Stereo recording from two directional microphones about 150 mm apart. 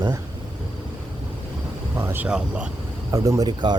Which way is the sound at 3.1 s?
25° right (ahead or behind).